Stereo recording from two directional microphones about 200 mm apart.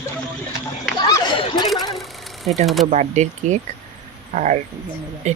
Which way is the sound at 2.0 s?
Centre (ahead or behind).